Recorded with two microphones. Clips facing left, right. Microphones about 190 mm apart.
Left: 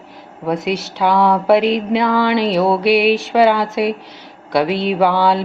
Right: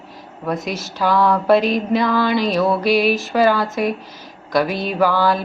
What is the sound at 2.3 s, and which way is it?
Speech, 65° left (ahead or behind).